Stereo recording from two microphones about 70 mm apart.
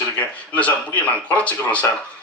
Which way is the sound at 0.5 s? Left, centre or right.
Centre.